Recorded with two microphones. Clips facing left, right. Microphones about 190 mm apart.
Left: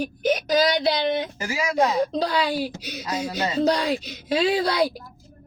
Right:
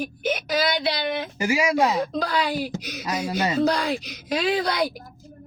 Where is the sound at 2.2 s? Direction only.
30° left (ahead or behind).